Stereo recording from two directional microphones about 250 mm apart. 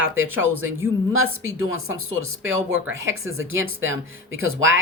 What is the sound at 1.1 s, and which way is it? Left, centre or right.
Speech, right.